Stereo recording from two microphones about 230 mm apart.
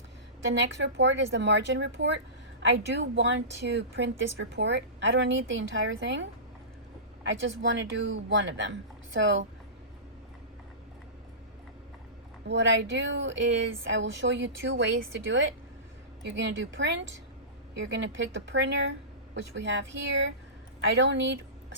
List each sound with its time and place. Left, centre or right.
0.7 s speech: right
7.3 s speech: right
12.5 s speech: right
13.7 s speech: right
13.9 s speech: right
16.2 s speech: right